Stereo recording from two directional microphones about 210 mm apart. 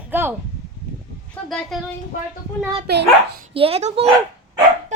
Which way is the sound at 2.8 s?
50° right (ahead or behind).